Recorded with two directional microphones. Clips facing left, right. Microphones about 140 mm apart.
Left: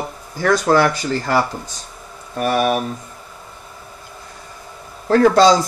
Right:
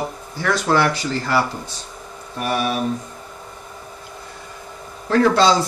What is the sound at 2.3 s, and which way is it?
Speech, 45° left (ahead or behind).